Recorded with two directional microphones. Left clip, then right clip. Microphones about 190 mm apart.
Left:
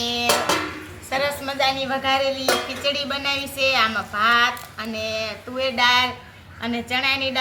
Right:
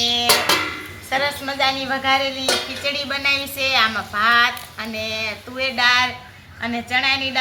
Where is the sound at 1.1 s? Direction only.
5° left (ahead or behind).